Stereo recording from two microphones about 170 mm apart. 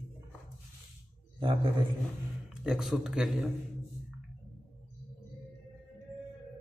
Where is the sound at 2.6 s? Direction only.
5° right (ahead or behind).